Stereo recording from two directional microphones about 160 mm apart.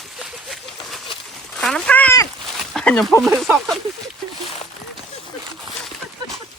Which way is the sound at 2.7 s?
5° left (ahead or behind).